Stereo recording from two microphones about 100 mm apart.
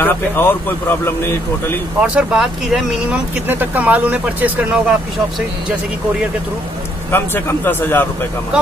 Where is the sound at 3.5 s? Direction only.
20° right (ahead or behind).